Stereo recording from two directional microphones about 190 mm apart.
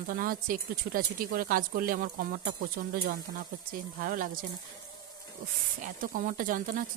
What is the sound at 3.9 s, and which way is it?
Speech, 45° right (ahead or behind).